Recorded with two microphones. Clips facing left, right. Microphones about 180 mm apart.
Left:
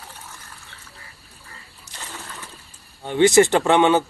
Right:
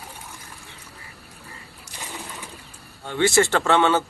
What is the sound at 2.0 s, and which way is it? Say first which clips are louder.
Pigeon: right 1 dB; 15° right (ahead or behind).